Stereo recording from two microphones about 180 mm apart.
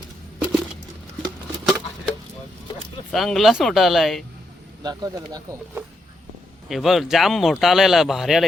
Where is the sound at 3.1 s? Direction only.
Centre (ahead or behind).